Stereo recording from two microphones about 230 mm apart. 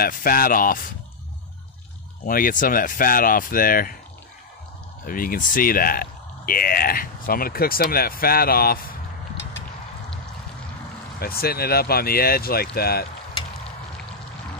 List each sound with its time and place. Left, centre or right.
0.0 s speech: left
2.2 s speech: left
5.0 s speech: left
11.1 s speech: left